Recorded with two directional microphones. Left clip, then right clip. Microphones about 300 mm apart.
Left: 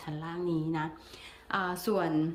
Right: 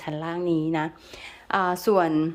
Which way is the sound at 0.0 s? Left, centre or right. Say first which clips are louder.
Right 8 dB; centre.